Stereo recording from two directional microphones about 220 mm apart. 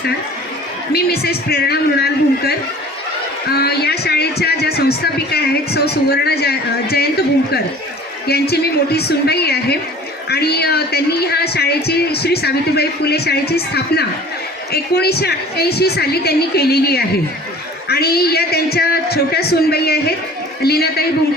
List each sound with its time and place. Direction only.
0.9 s speech: 45° left (ahead or behind)
8.3 s a man's voice: 45° left (ahead or behind)